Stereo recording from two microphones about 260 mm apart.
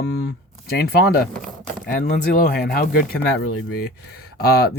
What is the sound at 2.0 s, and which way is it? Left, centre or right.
Speech, left.